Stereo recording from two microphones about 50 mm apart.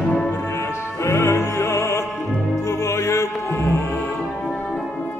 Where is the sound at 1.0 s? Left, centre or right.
Left.